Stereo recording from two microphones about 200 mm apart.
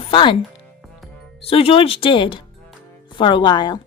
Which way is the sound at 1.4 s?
30° left (ahead or behind).